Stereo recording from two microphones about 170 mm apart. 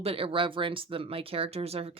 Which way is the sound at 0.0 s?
35° right (ahead or behind).